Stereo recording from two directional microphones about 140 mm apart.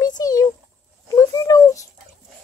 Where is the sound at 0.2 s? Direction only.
25° left (ahead or behind).